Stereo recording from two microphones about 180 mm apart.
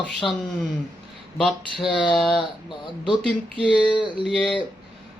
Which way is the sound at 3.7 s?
25° left (ahead or behind).